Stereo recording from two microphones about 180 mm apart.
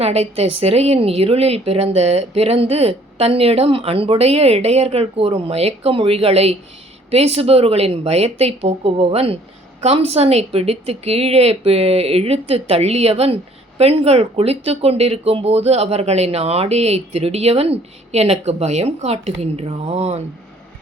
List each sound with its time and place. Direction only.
0.0 s speech: 35° right (ahead or behind)